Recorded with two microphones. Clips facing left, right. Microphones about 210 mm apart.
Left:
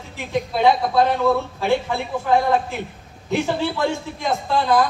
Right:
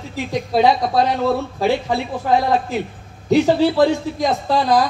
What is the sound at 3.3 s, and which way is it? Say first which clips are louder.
A man's voice: right 7 dB; 40° right (ahead or behind).